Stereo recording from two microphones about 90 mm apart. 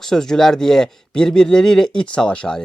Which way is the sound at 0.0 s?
5° left (ahead or behind).